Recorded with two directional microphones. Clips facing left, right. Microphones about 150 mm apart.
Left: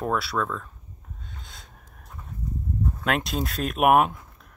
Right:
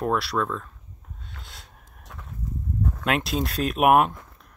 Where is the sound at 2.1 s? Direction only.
90° right.